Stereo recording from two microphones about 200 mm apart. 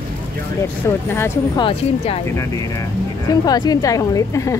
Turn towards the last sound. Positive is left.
turn(degrees=15)  # may be behind; listen again after turning